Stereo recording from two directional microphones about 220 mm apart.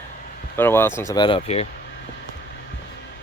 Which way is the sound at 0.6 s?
10° left (ahead or behind).